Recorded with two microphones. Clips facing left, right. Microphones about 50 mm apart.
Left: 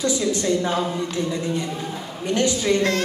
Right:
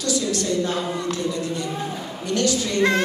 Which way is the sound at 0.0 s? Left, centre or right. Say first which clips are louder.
Left 2 dB; left.